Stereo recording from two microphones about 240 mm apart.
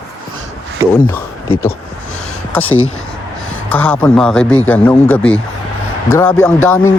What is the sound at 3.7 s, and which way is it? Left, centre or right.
Speech, centre.